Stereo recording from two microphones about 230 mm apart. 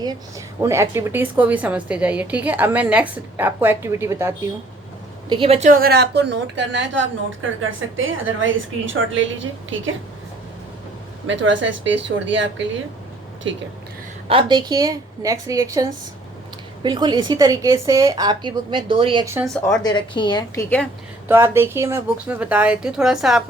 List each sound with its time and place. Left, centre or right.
0.0 s a woman's voice: centre
5.3 s a woman's voice: right
11.3 s speech: right
14.3 s a woman's voice: right
19.5 s speech: centre
19.8 s a woman's voice: left
21.2 s a woman's voice: centre